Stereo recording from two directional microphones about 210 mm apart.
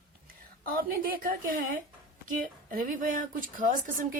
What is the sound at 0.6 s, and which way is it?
A woman's voice, 45° right (ahead or behind).